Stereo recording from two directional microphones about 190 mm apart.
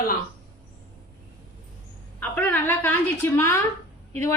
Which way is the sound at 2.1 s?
10° left (ahead or behind).